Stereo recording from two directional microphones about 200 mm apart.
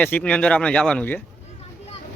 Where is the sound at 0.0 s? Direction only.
5° left (ahead or behind).